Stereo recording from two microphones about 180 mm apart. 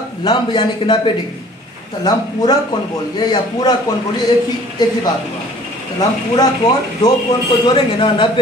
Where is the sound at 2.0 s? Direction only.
20° left (ahead or behind).